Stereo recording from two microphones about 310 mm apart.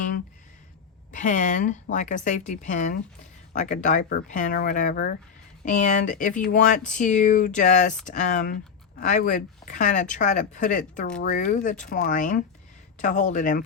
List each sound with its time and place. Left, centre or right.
1.1 s speech: left